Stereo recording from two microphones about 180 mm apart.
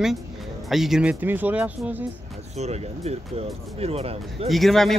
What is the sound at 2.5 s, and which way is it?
Speech, 35° right (ahead or behind).